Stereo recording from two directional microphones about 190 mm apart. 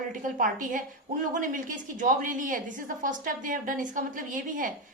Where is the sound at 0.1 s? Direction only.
45° right (ahead or behind).